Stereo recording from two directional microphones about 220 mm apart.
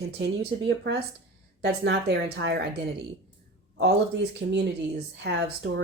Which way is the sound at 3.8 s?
50° right (ahead or behind).